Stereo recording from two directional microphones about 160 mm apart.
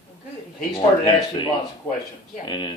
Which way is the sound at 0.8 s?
30° left (ahead or behind).